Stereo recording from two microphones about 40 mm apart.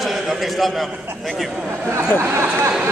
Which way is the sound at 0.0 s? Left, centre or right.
Centre.